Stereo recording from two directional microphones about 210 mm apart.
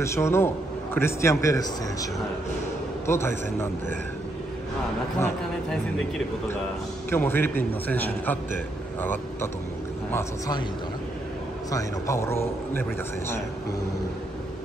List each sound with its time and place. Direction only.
0.0 s speech: 15° left (ahead or behind)
3.1 s speech: 10° left (ahead or behind)
7.1 s a man's voice: 10° left (ahead or behind)
11.7 s speech: 15° left (ahead or behind)